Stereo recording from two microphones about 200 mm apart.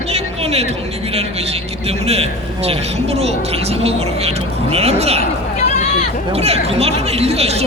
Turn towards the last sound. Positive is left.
turn(degrees=-30)  # may be behind; listen again after turning